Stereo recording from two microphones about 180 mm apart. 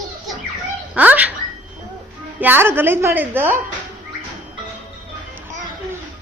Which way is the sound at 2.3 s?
10° right (ahead or behind).